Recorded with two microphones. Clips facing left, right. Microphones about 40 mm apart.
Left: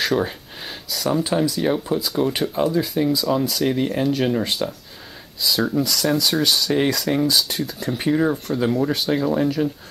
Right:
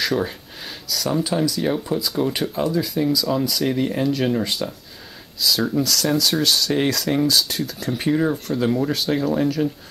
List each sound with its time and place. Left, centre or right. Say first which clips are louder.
0.0 s a sound: left 1 dB; centre
1.2 s speech: left 1 dB; centre
1.5 s speech: left 1 dB; centre